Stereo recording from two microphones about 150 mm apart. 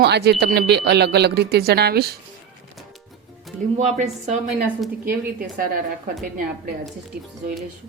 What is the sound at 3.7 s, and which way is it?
Speech, 50° right (ahead or behind).